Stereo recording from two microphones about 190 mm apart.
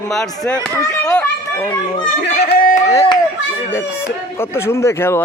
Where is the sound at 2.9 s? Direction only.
20° left (ahead or behind).